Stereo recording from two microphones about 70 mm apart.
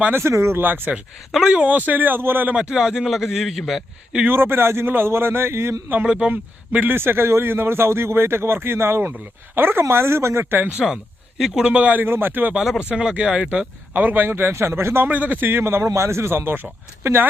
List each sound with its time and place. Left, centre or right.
0.1 s speech: right
0.6 s speech: right
1.3 s speech: centre
1.5 s speech: right
2.6 s a man's voice: centre
4.3 s speech: right
6.0 s speech: centre; by 10.6 s right
10.6 s speech: centre
12.0 s speech: right
12.5 s a man's voice: centre
12.9 s speech: centre; by 15.0 s right
15.0 s speech: right